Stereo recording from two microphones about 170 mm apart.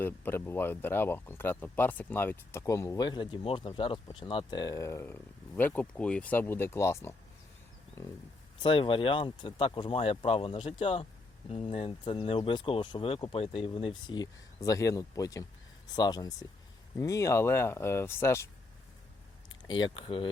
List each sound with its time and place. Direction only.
0.0 s speech: 15° left (ahead or behind)
8.6 s speech: 30° left (ahead or behind); by 18.4 s 15° left (ahead or behind)
19.6 s speech: 25° left (ahead or behind)